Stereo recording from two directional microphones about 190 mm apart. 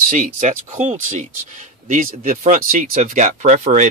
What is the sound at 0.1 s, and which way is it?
Speech, 40° right (ahead or behind).